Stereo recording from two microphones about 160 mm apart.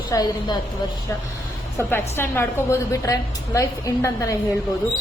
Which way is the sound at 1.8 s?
15° left (ahead or behind).